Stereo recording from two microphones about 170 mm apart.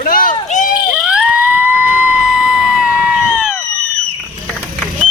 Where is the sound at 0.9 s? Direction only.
5° right (ahead or behind).